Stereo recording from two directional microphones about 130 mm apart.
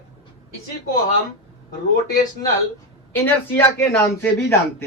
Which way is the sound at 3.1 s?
15° left (ahead or behind).